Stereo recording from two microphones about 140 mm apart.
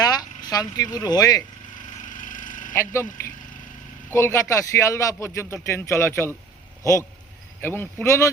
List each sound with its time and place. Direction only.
0.0 s a sound: 30° left (ahead or behind)
0.9 s speech: 30° left (ahead or behind)
2.0 s a sound: 70° left (ahead or behind)
2.7 s speech: 20° left (ahead or behind)
4.1 s speech: 20° left (ahead or behind)
7.6 s speech: 15° left (ahead or behind)